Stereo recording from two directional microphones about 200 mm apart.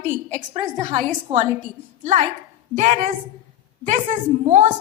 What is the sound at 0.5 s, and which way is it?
Speech, 30° right (ahead or behind).